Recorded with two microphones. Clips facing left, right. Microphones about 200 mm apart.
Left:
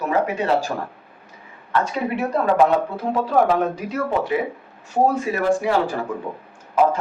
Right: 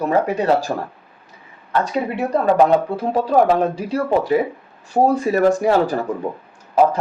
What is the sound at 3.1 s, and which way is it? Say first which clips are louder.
Speech: right 3 dB; 30° right (ahead or behind).